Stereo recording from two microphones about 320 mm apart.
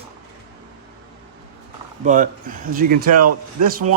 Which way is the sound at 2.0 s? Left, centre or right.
Right.